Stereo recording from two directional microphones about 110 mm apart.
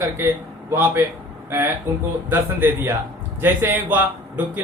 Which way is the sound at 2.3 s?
20° right (ahead or behind).